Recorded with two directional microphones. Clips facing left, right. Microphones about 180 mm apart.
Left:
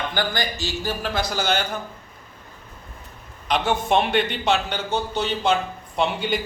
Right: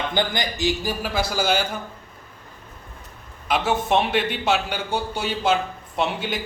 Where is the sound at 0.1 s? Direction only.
20° right (ahead or behind).